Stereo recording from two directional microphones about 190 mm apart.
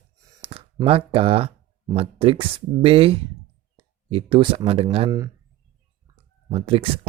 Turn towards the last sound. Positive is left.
turn(degrees=-30)  # may be behind; listen again after turning